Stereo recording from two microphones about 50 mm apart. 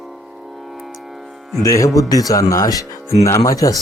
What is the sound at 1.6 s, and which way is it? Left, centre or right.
Speech, left.